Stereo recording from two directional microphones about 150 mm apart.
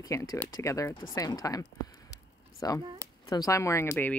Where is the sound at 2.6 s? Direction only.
25° left (ahead or behind).